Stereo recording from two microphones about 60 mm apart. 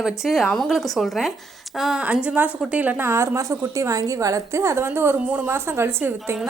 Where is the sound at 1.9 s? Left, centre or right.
Right.